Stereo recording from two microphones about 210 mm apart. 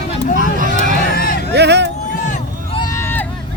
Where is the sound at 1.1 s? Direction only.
45° left (ahead or behind).